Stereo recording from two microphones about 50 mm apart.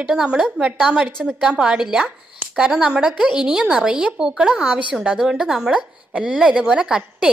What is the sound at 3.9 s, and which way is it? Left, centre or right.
Speech, right.